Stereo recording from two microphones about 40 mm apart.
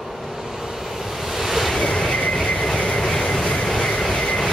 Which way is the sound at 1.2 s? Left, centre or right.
Centre.